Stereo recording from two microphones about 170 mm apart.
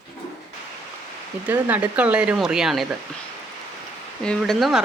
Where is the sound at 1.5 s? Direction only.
10° right (ahead or behind).